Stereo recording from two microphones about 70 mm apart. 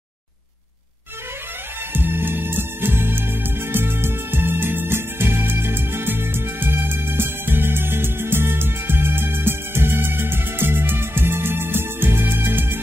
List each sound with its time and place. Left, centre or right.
2.0 s music: right